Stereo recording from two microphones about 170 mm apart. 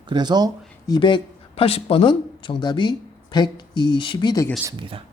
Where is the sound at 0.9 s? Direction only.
30° left (ahead or behind).